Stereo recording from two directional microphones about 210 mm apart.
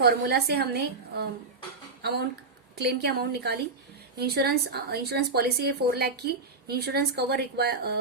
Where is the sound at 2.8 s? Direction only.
50° right (ahead or behind).